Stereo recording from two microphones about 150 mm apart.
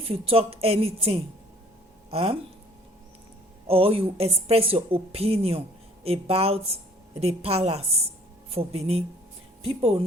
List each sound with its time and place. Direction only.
0.1 s a woman's voice: 40° right (ahead or behind)
3.7 s a woman's voice: 40° right (ahead or behind)